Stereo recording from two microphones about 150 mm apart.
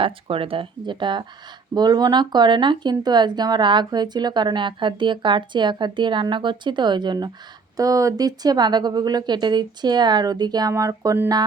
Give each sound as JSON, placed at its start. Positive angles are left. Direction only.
{"t": 0.0, "sound": "speech", "side_deg": -35}